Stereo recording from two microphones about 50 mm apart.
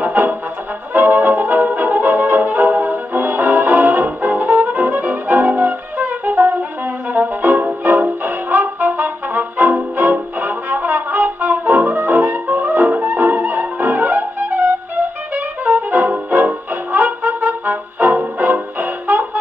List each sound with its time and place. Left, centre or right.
0.0 s brass instrument: right
7.1 s music: right